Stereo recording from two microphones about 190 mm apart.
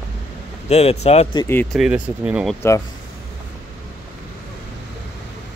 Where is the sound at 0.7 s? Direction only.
35° left (ahead or behind).